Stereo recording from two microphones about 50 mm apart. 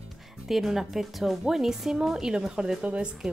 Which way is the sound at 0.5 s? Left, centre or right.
Centre.